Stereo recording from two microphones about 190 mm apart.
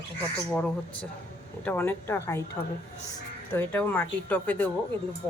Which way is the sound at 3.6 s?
10° left (ahead or behind).